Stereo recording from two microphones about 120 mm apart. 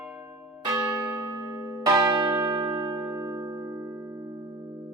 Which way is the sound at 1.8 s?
25° right (ahead or behind).